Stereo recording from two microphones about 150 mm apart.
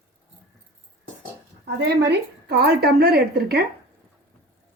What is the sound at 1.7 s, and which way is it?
A woman's voice, 90° right.